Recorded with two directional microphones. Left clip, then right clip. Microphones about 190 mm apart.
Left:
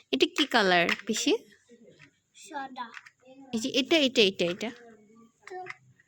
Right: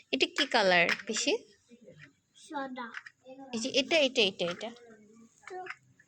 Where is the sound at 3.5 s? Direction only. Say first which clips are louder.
Left 2 dB; 45° left (ahead or behind).